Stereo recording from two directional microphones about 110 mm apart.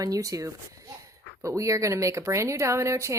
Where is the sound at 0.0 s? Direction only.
30° right (ahead or behind).